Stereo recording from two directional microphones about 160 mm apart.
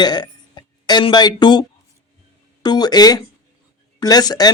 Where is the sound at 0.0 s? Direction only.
25° left (ahead or behind).